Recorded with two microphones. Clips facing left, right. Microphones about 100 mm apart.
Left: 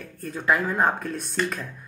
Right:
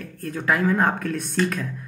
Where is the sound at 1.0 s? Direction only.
60° right (ahead or behind).